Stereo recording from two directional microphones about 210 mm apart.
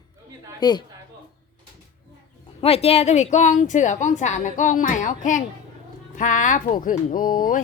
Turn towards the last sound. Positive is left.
turn(degrees=40)  # may be behind; listen again after turning